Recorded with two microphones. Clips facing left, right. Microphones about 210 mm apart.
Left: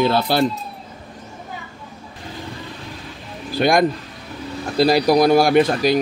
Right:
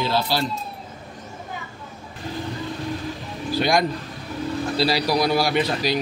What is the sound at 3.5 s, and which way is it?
A man's voice, 55° left (ahead or behind).